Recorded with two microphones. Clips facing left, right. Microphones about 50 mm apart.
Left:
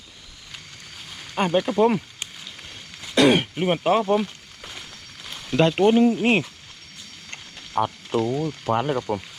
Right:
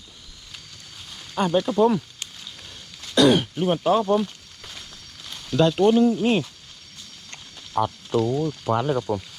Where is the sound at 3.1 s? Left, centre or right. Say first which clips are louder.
Even; left.